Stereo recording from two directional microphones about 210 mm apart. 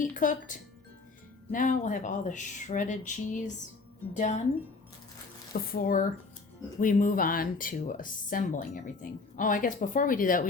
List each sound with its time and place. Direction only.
0.0 s speech: 40° left (ahead or behind)
5.5 s speech: 45° left (ahead or behind)